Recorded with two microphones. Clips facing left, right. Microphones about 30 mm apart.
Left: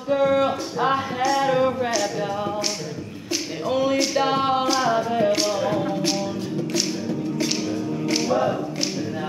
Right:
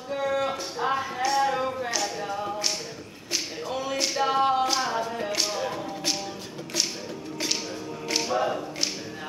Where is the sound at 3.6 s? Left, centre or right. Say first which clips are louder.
Left 13 dB; centre.